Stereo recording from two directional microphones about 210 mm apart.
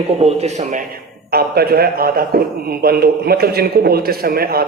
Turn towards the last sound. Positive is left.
turn(degrees=-45)  # may be behind; listen again after turning